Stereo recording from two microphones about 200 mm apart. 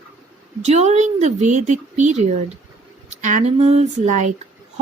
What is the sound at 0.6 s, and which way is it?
A woman's voice, 35° right (ahead or behind).